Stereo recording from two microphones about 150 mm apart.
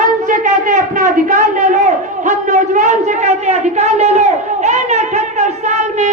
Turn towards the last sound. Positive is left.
turn(degrees=-50)  # may be behind; listen again after turning